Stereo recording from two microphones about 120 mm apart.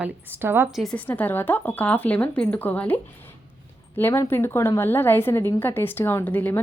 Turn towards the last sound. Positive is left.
turn(degrees=15)  # may be behind; listen again after turning